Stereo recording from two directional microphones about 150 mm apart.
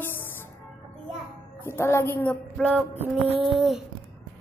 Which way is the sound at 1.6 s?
15° left (ahead or behind).